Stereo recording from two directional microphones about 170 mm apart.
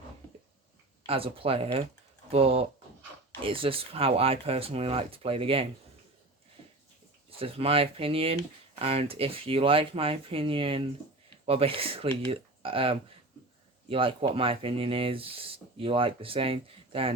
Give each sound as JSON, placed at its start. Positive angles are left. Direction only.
{"t": 1.0, "sound": "speech", "side_deg": -35}
{"t": 7.3, "sound": "speech", "side_deg": -35}